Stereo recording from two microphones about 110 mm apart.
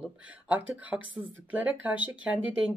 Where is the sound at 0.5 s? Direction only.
15° right (ahead or behind).